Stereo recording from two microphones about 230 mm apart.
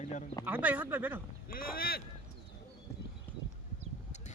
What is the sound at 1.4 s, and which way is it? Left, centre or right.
Speech, left.